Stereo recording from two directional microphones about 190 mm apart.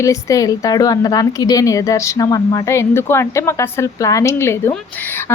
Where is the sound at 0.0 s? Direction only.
15° left (ahead or behind).